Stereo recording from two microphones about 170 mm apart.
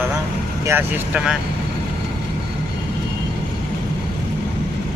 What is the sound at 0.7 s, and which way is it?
Speech, 10° right (ahead or behind).